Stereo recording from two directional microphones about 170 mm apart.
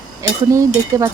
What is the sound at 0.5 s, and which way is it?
Speech, 20° right (ahead or behind).